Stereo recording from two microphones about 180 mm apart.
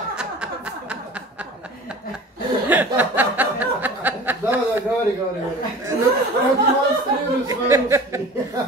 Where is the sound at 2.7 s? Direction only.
10° right (ahead or behind).